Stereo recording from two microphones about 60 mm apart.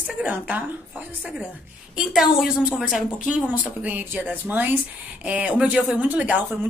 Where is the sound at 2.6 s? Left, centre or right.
Centre.